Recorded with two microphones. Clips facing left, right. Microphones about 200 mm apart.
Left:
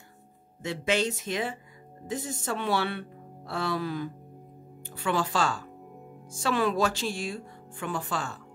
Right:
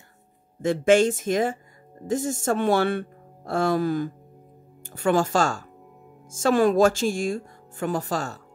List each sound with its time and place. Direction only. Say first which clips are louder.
0.6 s speech: right 10 dB; 50° right (ahead or behind)